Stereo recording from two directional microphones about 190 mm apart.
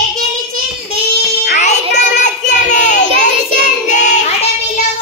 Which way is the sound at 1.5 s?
40° left (ahead or behind).